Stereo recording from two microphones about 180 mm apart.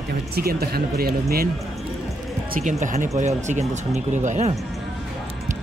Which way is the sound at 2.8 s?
45° right (ahead or behind).